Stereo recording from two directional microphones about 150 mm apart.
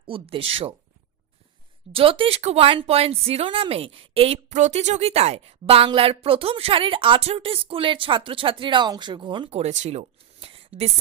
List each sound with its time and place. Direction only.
0.1 s speech: 40° right (ahead or behind)
1.9 s speech: 40° right (ahead or behind)